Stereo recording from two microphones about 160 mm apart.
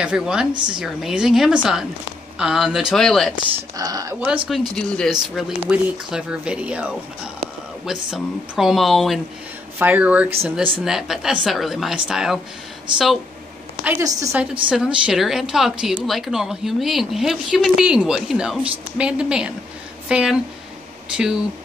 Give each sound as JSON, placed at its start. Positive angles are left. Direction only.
{"t": 0.0, "sound": "a woman's voice", "side_deg": -5}
{"t": 0.5, "sound": "speech", "side_deg": -30}
{"t": 0.7, "sound": "a woman's voice", "side_deg": -5}
{"t": 3.7, "sound": "speech", "side_deg": -20}
{"t": 4.5, "sound": "a woman's voice", "side_deg": 5}
{"t": 9.8, "sound": "a woman's voice", "side_deg": -10}
{"t": 13.8, "sound": "speech", "side_deg": -15}
{"t": 14.4, "sound": "a woman's voice", "side_deg": -5}